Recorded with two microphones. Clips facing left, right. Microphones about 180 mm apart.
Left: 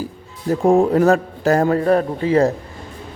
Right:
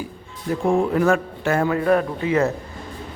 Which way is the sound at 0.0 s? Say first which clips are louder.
Left 5 dB; 40° left (ahead or behind).